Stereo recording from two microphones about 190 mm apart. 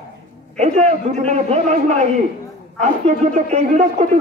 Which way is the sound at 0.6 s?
35° right (ahead or behind).